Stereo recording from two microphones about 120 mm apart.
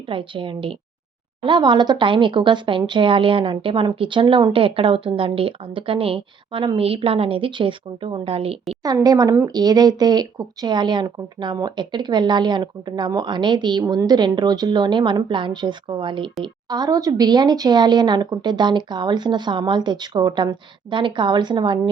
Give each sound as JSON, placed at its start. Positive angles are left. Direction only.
{"t": 0.1, "sound": "speech", "side_deg": -45}
{"t": 9.0, "sound": "speech", "side_deg": -30}